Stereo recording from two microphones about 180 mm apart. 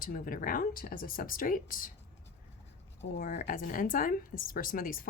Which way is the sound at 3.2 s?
50° left (ahead or behind).